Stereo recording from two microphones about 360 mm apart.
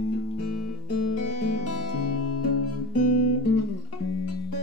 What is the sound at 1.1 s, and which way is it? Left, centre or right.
Music, left.